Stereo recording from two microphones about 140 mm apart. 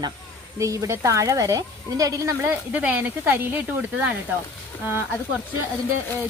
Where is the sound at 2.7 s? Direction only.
10° right (ahead or behind).